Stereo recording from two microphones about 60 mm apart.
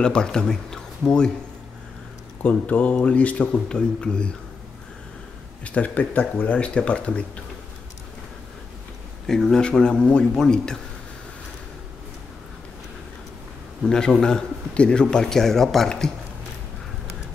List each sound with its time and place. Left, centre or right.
0.0 s a man's voice: centre
2.4 s a man's voice: left
5.6 s speech: left
9.3 s a man's voice: centre
13.8 s a man's voice: centre